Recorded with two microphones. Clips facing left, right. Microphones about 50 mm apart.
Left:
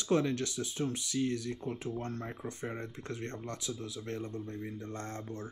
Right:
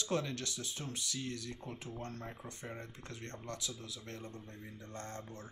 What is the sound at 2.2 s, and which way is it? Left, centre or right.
Speech, left.